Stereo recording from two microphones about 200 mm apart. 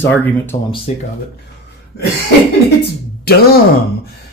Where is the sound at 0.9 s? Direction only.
35° left (ahead or behind).